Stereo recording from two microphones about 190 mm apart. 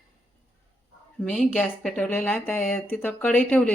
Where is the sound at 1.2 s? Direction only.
Centre (ahead or behind).